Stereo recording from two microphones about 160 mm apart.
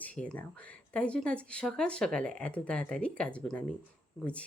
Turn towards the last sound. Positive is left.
turn(degrees=10)  # may be behind; listen again after turning